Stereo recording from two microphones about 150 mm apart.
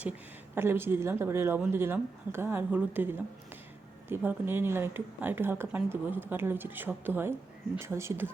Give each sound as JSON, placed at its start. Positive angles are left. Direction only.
{"t": 0.5, "sound": "speech", "side_deg": -15}